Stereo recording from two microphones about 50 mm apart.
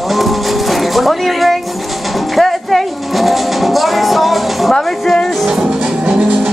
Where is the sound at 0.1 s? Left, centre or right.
Centre.